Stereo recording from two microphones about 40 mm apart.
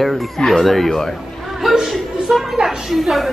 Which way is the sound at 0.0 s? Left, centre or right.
Centre.